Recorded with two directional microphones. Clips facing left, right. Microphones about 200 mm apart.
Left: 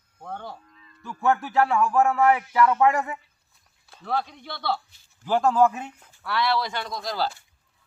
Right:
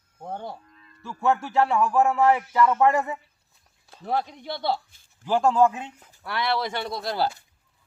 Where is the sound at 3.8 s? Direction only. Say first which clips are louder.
Right 3 dB; 40° right (ahead or behind).